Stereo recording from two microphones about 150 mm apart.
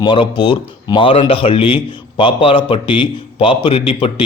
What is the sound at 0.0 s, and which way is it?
A man's voice, 30° left (ahead or behind).